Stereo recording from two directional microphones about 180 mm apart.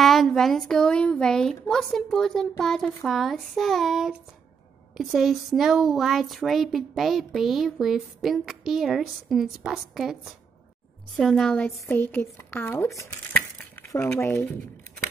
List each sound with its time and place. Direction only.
0.0 s speech: centre (ahead or behind)